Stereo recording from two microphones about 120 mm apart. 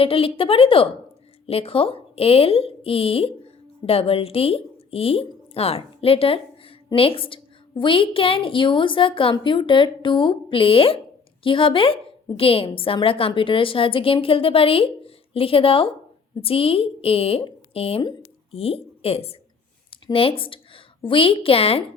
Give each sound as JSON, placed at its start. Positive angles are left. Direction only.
{"t": 0.0, "sound": "a woman's voice", "side_deg": 50}